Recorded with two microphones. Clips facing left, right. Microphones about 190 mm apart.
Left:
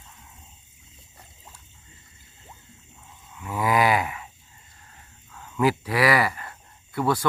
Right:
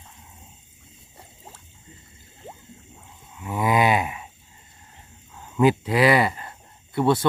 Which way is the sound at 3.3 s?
20° right (ahead or behind).